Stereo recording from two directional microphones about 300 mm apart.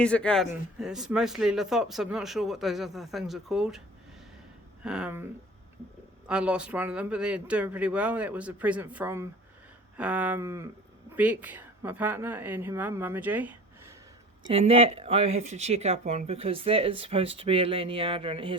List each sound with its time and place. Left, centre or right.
0.0 s speech: centre
4.8 s a woman's voice: centre
14.4 s speech: centre